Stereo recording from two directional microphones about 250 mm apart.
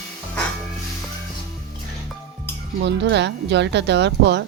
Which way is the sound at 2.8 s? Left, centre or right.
Right.